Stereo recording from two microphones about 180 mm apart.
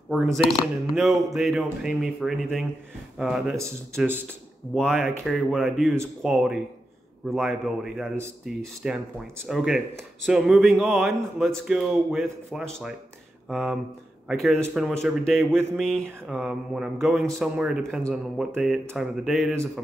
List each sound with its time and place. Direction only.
0.4 s speech: centre (ahead or behind)
4.7 s speech: 5° left (ahead or behind)